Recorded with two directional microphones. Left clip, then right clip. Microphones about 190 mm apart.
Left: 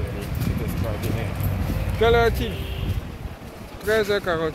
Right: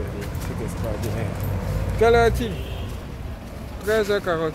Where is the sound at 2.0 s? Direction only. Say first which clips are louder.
Right 2 dB; 15° right (ahead or behind).